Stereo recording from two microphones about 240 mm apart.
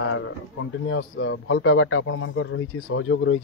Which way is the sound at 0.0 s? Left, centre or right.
Left.